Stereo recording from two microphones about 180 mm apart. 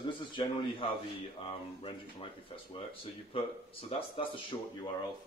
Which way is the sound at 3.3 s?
30° left (ahead or behind).